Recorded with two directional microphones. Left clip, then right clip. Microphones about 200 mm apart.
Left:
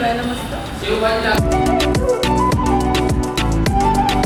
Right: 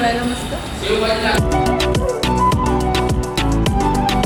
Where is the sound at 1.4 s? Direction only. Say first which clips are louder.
Left 1 dB; centre (ahead or behind).